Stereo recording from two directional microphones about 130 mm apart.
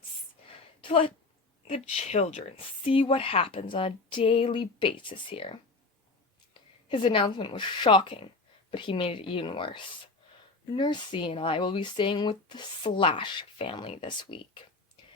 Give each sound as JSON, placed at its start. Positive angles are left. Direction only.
{"t": 0.8, "sound": "speech", "side_deg": 40}
{"t": 1.6, "sound": "speech", "side_deg": 55}
{"t": 6.8, "sound": "speech", "side_deg": 40}